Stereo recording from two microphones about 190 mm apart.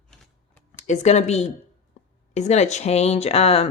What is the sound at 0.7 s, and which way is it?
Speech, 40° left (ahead or behind).